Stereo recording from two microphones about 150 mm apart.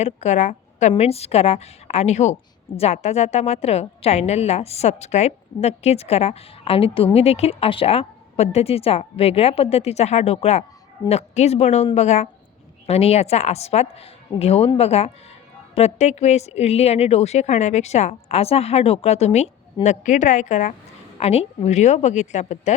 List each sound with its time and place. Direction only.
0.0 s a woman's voice: 50° left (ahead or behind)
21.2 s a woman's voice: 45° left (ahead or behind)